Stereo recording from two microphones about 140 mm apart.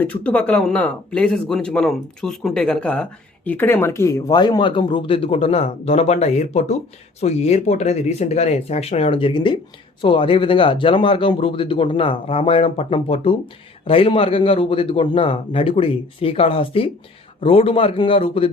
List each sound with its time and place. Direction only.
0.0 s speech: 10° left (ahead or behind); by 18.4 s 40° left (ahead or behind)